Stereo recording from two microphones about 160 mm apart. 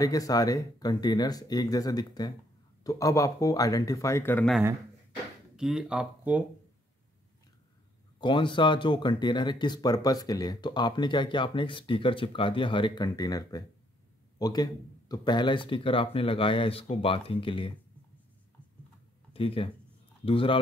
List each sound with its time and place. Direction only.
0.0 s speech: 20° left (ahead or behind)
5.6 s speech: 5° right (ahead or behind)
8.2 s speech: 30° left (ahead or behind)
19.3 s speech: 35° left (ahead or behind)